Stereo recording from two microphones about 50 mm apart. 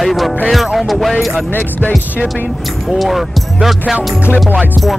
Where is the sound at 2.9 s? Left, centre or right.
Centre.